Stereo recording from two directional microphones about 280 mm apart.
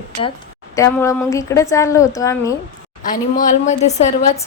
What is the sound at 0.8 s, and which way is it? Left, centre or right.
A woman's voice, centre.